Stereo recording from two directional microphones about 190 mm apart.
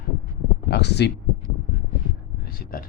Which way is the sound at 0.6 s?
60° left (ahead or behind).